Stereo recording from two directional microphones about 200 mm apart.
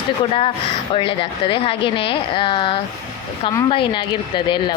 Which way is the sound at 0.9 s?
25° left (ahead or behind).